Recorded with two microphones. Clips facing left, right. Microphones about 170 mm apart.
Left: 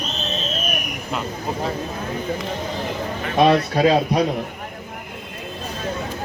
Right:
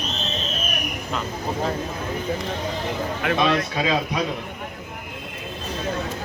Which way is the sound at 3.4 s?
40° left (ahead or behind).